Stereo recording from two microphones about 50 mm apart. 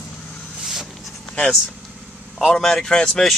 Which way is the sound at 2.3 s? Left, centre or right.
Centre.